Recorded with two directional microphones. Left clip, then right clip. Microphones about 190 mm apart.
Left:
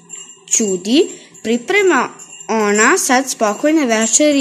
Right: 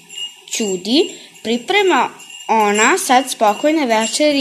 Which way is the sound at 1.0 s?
35° left (ahead or behind).